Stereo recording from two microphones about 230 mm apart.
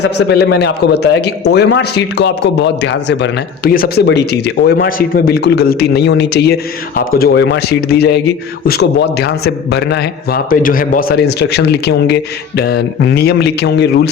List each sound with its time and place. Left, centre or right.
0.2 s a man's voice: left